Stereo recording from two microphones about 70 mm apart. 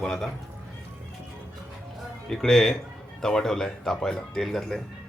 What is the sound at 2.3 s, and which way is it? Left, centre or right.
Speech, centre.